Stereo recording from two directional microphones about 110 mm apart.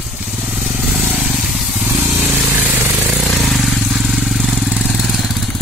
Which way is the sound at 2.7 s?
20° right (ahead or behind).